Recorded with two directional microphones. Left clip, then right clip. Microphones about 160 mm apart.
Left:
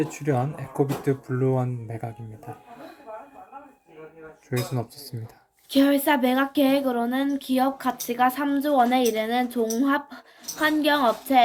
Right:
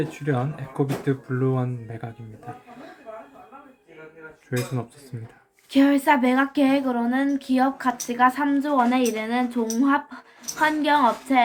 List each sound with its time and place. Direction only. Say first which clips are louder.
0.3 s speech: left 1 dB; 30° left (ahead or behind)
1.4 s speech: left 1 dB; 15° left (ahead or behind)
5.7 s speech: right 2 dB; 15° left (ahead or behind)